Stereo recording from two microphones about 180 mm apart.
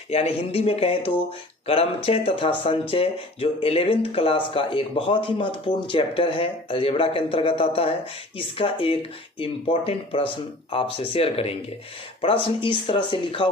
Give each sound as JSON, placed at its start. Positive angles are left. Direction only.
{"t": 0.1, "sound": "speech", "side_deg": 35}